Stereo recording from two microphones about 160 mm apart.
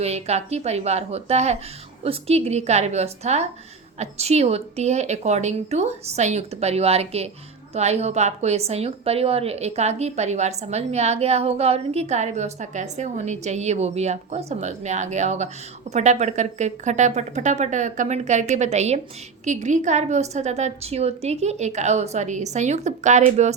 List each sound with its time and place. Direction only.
0.0 s a woman's voice: 40° right (ahead or behind)